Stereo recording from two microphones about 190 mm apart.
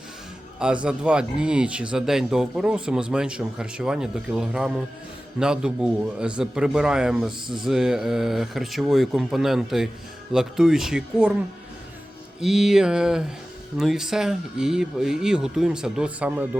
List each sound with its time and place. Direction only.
0.6 s speech: 5° right (ahead or behind)
12.4 s speech: centre (ahead or behind)